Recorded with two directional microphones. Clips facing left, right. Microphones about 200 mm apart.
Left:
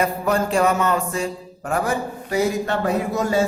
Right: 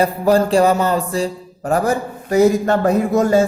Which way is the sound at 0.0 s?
35° right (ahead or behind).